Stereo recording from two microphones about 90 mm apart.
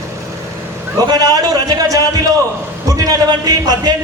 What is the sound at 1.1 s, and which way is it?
A man's voice, 50° right (ahead or behind).